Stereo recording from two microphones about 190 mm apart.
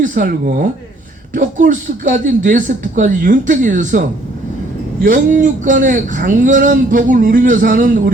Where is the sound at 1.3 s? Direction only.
45° right (ahead or behind).